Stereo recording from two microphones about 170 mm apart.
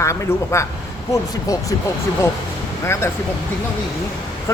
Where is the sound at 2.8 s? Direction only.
15° left (ahead or behind).